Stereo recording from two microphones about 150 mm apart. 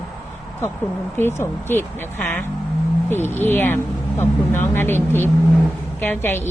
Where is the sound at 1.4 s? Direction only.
15° left (ahead or behind).